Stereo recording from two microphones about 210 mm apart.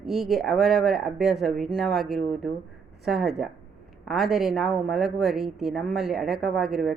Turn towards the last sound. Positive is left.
turn(degrees=0)  # may be behind; listen again after turning